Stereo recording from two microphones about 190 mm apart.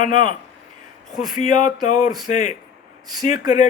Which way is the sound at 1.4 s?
40° left (ahead or behind).